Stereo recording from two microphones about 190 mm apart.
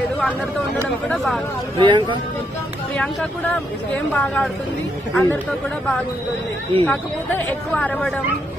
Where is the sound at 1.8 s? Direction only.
25° right (ahead or behind).